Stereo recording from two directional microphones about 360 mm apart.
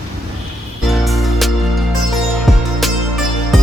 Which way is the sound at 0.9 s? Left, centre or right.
Centre.